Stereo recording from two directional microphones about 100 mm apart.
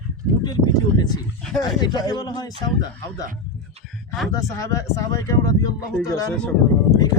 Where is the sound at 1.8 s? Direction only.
45° left (ahead or behind).